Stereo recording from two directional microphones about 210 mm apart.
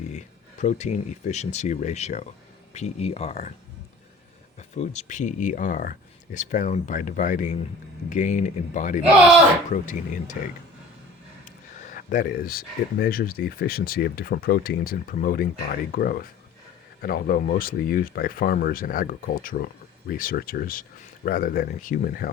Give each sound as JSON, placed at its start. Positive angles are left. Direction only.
{"t": 0.6, "sound": "speech", "side_deg": 35}
{"t": 4.7, "sound": "speech", "side_deg": 35}
{"t": 11.9, "sound": "speech", "side_deg": 40}